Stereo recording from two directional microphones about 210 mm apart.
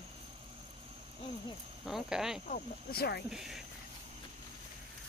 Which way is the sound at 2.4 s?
40° left (ahead or behind).